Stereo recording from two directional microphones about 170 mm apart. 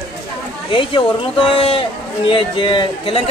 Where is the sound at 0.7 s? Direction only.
30° left (ahead or behind).